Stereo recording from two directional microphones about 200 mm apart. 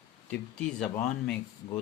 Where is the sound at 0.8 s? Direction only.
5° left (ahead or behind).